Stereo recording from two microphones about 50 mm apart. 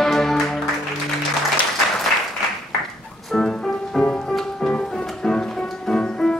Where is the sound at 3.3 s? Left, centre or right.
Centre.